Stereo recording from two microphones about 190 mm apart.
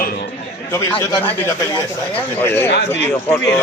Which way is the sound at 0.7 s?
15° left (ahead or behind).